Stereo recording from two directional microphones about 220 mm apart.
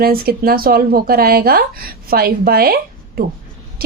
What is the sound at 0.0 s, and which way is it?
A woman's voice, 45° right (ahead or behind).